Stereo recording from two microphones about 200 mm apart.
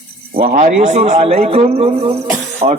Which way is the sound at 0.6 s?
35° right (ahead or behind).